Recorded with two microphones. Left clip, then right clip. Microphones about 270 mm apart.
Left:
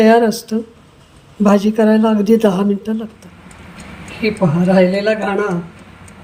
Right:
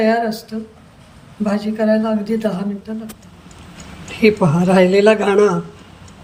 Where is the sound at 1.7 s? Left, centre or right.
Centre.